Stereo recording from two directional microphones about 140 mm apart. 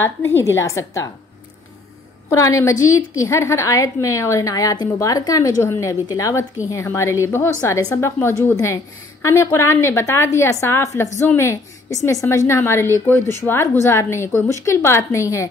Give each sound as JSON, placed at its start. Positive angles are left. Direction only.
{"t": 0.0, "sound": "a woman's voice", "side_deg": 15}
{"t": 2.2, "sound": "a woman's voice", "side_deg": 20}